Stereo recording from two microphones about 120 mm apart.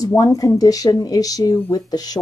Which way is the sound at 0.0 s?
30° left (ahead or behind).